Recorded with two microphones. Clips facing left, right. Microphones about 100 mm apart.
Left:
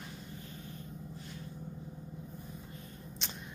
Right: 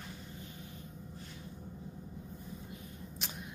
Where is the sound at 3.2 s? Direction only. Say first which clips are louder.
Even; 5° right (ahead or behind).